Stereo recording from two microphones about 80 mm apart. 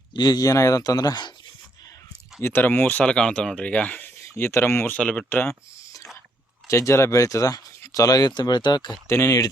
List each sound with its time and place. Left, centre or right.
0.1 s speech: left
2.4 s speech: left
3.0 s speech: centre
4.2 s speech: left
4.9 s speech: centre
5.3 s speech: left
6.7 s speech: left
8.4 s speech: left
9.0 s speech: left